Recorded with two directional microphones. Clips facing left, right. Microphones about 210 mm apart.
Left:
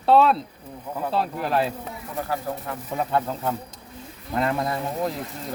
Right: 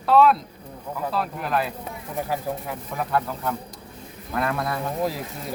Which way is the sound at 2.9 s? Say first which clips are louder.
Left 1 dB; 25° left (ahead or behind).